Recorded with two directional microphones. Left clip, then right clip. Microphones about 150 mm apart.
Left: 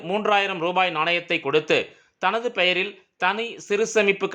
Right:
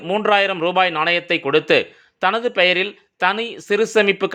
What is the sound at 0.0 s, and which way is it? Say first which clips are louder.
Speech: right 5 dB; 25° right (ahead or behind).